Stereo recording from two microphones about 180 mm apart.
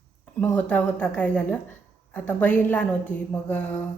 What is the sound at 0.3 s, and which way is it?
A woman's voice, 10° left (ahead or behind).